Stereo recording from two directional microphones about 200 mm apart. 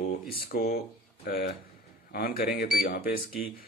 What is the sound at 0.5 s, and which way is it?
Speech, 45° left (ahead or behind).